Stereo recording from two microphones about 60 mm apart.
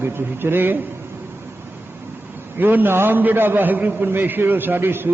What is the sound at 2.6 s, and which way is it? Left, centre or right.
A man's voice, right.